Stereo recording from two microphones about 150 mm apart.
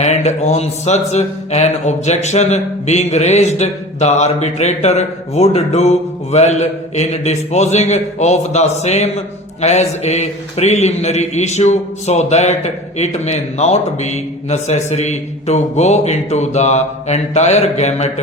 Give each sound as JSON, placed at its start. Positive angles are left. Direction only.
{"t": 0.0, "sound": "speech", "side_deg": 50}